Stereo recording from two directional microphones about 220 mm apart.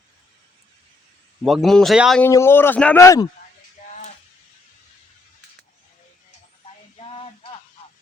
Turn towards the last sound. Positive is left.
turn(degrees=25)  # may be behind; listen again after turning